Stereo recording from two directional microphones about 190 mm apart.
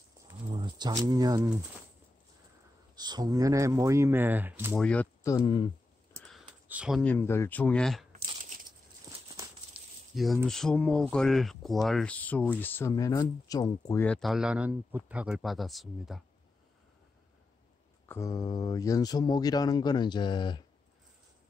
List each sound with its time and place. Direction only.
0.3 s speech: 25° right (ahead or behind)
3.0 s speech: 20° right (ahead or behind)
4.7 s speech: 5° left (ahead or behind)
5.2 s speech: 20° left (ahead or behind)
6.2 s a sound: 5° right (ahead or behind)
7.0 s speech: 10° left (ahead or behind)
9.8 s a sound: 5° right (ahead or behind)
10.1 s speech: centre (ahead or behind); by 14.0 s 20° left (ahead or behind)
14.0 s speech: 5° left (ahead or behind)
18.0 s speech: 15° left (ahead or behind)